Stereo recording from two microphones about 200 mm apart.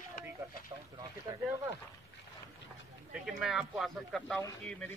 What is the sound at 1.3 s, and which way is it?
Speech, 15° right (ahead or behind).